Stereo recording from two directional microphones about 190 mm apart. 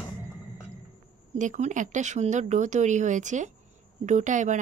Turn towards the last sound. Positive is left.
turn(degrees=-40)  # may be behind; listen again after turning